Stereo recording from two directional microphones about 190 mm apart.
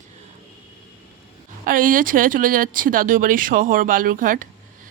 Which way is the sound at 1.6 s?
45° right (ahead or behind).